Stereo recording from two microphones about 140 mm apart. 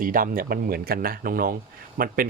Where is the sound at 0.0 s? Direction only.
80° right.